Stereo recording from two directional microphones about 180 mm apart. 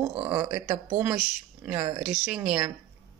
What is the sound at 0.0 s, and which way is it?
Speech, 25° right (ahead or behind).